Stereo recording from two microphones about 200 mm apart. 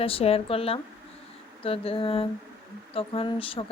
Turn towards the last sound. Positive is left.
turn(degrees=25)  # may be behind; listen again after turning